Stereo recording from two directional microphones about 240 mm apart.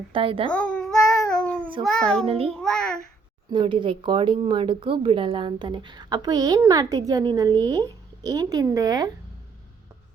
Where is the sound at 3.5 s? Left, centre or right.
Centre.